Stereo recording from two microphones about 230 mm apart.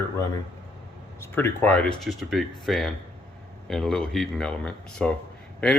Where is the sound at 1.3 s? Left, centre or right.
Centre.